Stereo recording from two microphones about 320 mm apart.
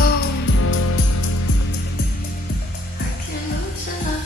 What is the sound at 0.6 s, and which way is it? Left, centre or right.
Music, left.